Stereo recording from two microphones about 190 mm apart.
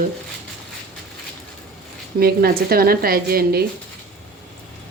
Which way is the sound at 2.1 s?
50° right (ahead or behind).